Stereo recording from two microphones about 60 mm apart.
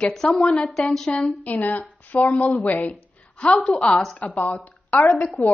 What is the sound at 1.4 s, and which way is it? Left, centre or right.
A woman's voice, left.